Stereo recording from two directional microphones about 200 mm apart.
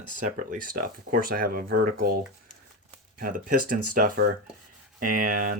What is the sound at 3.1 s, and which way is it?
Speech, 45° right (ahead or behind).